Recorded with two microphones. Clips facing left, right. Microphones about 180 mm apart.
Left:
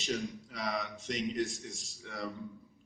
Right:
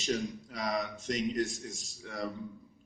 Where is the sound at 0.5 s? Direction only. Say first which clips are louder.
Right 4 dB; 45° right (ahead or behind).